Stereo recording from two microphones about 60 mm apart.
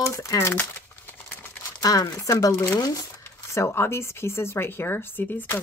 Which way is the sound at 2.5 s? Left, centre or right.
Left.